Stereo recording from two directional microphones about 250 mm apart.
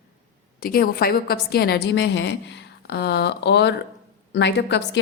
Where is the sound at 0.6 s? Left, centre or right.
Left.